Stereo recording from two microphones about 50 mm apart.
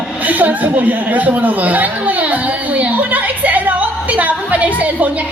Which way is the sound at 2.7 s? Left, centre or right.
Right.